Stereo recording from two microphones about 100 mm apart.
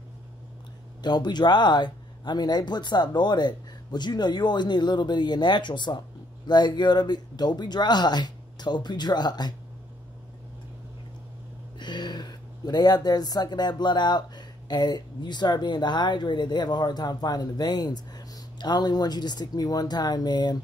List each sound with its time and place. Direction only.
1.0 s speech: 45° left (ahead or behind)
11.8 s speech: 45° left (ahead or behind)